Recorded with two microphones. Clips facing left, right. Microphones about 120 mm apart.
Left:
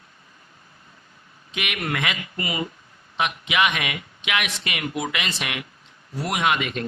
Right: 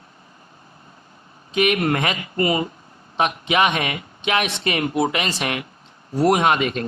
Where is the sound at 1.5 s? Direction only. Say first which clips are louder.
Right 9 dB; 40° right (ahead or behind).